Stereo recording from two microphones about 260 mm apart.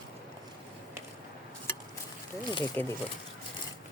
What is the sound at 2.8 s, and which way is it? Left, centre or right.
Speech, centre.